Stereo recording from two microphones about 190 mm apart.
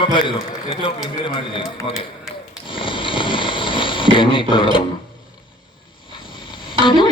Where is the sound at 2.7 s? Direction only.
25° left (ahead or behind).